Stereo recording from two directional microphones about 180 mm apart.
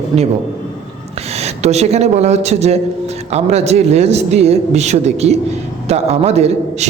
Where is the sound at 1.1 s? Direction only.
35° right (ahead or behind).